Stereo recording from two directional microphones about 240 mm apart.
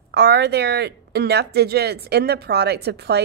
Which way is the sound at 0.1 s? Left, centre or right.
Right.